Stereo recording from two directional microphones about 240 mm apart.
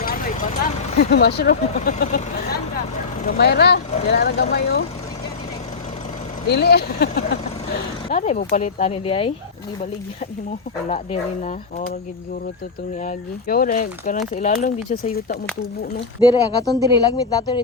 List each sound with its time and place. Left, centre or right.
0.0 s vehicle: left
0.9 s speech: left
3.2 s speech: left
6.5 s speech: left
8.1 s speech: left
10.8 s speech: left
13.1 s speech: left
16.2 s speech: centre